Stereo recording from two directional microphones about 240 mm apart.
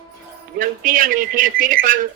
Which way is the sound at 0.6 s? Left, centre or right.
Right.